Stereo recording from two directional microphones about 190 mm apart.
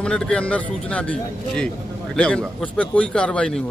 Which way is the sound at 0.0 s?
5° left (ahead or behind).